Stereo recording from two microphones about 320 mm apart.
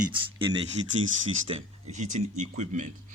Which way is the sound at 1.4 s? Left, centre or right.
Centre.